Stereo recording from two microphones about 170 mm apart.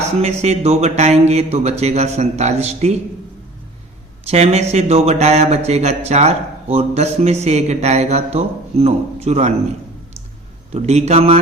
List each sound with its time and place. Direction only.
0.0 s speech: 40° right (ahead or behind)
4.3 s speech: 40° right (ahead or behind)
10.7 s speech: 40° right (ahead or behind)